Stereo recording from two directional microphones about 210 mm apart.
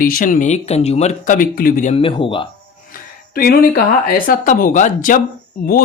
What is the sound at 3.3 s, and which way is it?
Speech, 45° left (ahead or behind).